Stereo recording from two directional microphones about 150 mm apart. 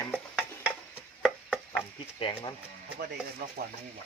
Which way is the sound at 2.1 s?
35° left (ahead or behind).